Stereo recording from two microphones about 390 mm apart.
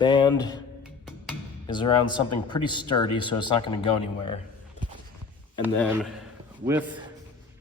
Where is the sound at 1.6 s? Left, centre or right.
Centre.